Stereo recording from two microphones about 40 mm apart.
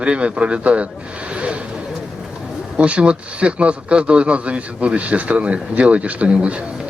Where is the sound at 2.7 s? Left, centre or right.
Right.